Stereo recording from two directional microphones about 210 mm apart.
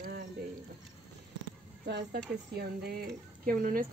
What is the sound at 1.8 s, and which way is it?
Speech, 50° right (ahead or behind).